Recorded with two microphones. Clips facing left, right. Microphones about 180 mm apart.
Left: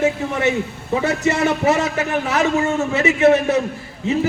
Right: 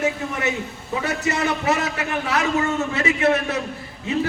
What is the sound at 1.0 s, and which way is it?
A man's voice, 25° left (ahead or behind).